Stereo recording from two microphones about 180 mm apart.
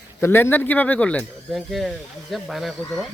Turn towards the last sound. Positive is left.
turn(degrees=0)  # may be behind; listen again after turning